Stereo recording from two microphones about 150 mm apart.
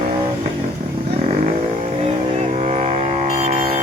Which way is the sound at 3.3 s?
50° right (ahead or behind).